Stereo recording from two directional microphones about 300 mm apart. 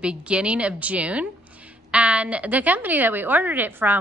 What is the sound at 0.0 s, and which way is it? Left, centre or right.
A woman's voice, centre.